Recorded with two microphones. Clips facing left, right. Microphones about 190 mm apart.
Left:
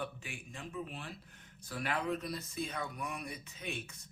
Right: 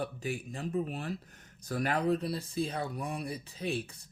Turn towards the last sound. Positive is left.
turn(degrees=-35)  # may be behind; listen again after turning